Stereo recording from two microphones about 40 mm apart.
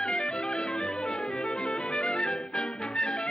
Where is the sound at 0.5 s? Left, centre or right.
Centre.